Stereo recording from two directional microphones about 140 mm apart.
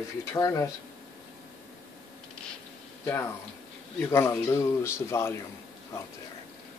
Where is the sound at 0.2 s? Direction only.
20° left (ahead or behind).